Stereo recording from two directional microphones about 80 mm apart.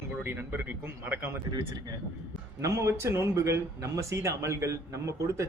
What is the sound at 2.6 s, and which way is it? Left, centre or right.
Speech, right.